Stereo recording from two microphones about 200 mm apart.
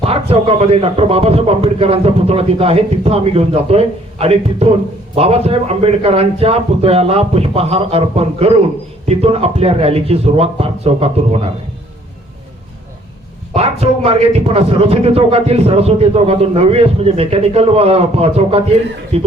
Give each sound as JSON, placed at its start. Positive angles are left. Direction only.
{"t": 0.0, "sound": "a man's voice", "side_deg": -30}
{"t": 13.5, "sound": "a man's voice", "side_deg": -30}